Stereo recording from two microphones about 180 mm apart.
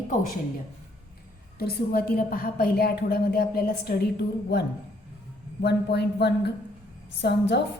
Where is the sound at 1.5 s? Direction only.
60° left (ahead or behind).